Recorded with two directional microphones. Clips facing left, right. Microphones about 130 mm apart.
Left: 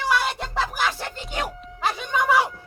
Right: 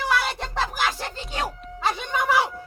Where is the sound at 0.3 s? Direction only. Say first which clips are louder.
Left 1 dB; 5° left (ahead or behind).